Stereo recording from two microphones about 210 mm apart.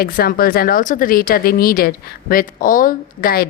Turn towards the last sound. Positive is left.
turn(degrees=45)  # may be behind; listen again after turning